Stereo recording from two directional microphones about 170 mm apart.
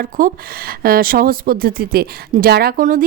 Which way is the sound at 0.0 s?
55° right (ahead or behind).